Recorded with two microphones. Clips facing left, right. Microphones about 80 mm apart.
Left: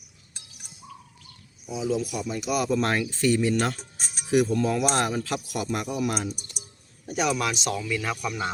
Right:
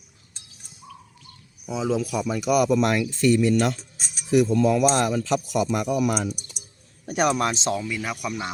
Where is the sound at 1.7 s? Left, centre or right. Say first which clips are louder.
Right 4 dB; right.